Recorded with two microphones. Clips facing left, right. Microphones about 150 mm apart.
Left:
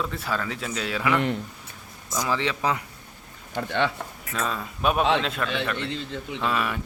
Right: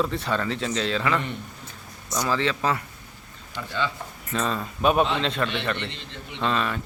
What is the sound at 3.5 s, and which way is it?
Speech, 55° left (ahead or behind).